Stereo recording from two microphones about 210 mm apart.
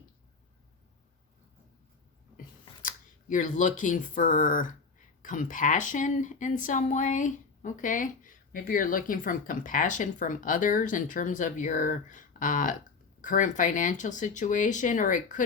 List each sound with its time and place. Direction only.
2.8 s speech: 40° left (ahead or behind)